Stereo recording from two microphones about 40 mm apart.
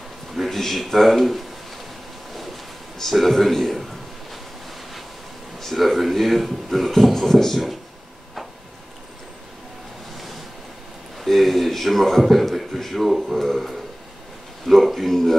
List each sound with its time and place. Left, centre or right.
0.3 s a man's voice: centre
2.3 s a sound: centre
5.6 s a man's voice: centre
10.1 s waves: centre
11.1 s a man's voice: centre